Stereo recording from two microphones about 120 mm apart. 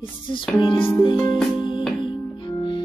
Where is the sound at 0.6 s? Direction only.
40° left (ahead or behind).